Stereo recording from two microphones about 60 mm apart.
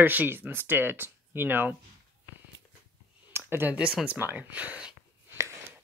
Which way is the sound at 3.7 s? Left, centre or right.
Centre.